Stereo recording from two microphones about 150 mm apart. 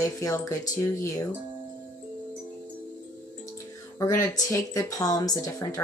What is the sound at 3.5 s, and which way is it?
A woman's voice, 20° left (ahead or behind).